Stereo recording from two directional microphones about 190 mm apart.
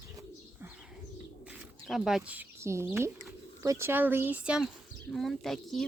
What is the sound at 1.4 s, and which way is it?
Speech, 5° right (ahead or behind).